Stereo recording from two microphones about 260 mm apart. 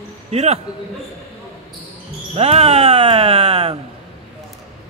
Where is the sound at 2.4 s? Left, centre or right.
Right.